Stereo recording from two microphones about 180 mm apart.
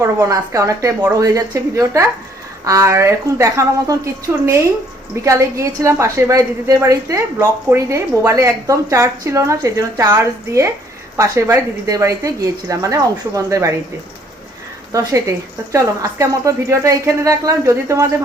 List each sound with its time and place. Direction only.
0.0 s a woman's voice: 15° right (ahead or behind)
14.9 s a woman's voice: 15° right (ahead or behind)